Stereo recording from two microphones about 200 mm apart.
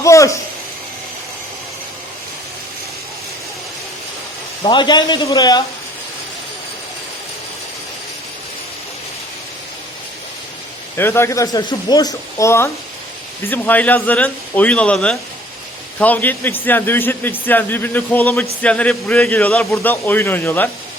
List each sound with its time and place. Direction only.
0.0 s a sound: 15° left (ahead or behind)
4.6 s a man's voice: 20° left (ahead or behind)
10.9 s a man's voice: 10° left (ahead or behind)